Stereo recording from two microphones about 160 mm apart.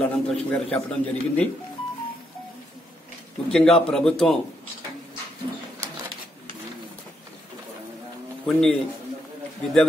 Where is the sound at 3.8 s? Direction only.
5° left (ahead or behind).